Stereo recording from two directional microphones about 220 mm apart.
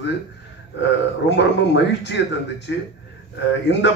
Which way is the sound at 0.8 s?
55° left (ahead or behind).